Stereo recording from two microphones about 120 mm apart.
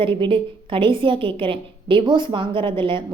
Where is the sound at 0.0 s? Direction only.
45° right (ahead or behind).